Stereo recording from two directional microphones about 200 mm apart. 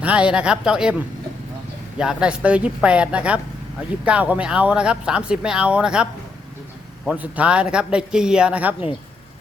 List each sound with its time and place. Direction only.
0.0 s speech: 5° right (ahead or behind)